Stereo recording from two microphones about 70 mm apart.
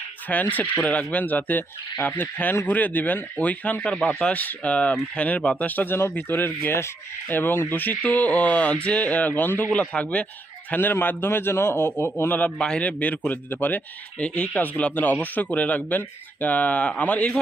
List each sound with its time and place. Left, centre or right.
0.3 s fowl: left
9.6 s a man's voice: centre
10.7 s a man's voice: left
12.5 s fowl: centre